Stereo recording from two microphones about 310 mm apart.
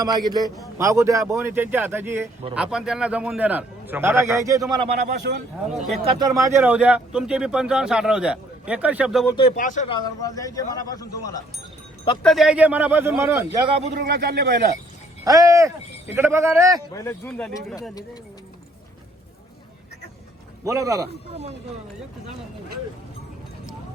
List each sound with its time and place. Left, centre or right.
0.0 s a man's voice: centre
9.3 s speech: left
10.0 s speech: centre
12.2 s a man's voice: centre; by 14.6 s right
15.2 s a man's voice: centre
16.9 s speech: centre
20.7 s a man's voice: centre